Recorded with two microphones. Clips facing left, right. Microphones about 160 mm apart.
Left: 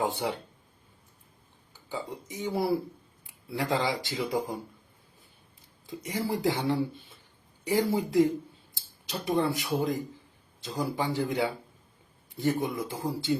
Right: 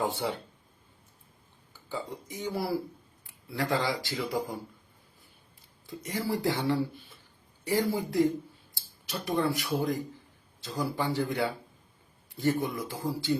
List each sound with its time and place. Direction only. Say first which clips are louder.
0.0 s speech: left 1 dB; 15° left (ahead or behind)
1.9 s speech: even; 20° left (ahead or behind)
5.8 s a man's voice: left 1 dB; 20° left (ahead or behind)
12.3 s speech: even; 20° left (ahead or behind)